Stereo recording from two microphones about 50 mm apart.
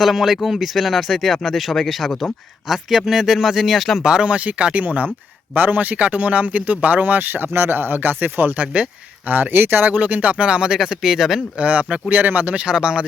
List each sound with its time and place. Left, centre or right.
0.0 s speech: centre
4.0 s a man's voice: centre; by 8.5 s right
8.5 s speech: right
9.2 s speech: right; by 11.4 s centre
11.5 s speech: right
12.6 s speech: centre